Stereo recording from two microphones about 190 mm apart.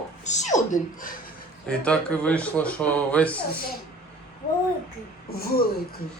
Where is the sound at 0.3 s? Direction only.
40° left (ahead or behind).